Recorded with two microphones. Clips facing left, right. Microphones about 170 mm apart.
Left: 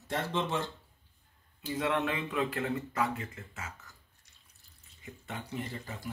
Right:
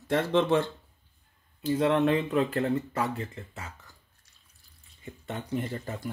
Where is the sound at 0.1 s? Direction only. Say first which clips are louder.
Right 9 dB; 65° right (ahead or behind).